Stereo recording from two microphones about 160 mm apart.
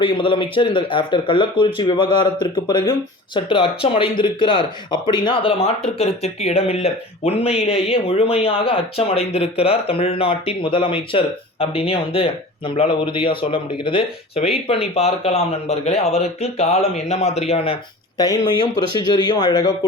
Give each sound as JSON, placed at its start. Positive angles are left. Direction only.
{"t": 0.0, "sound": "speech", "side_deg": 30}
{"t": 18.2, "sound": "speech", "side_deg": 25}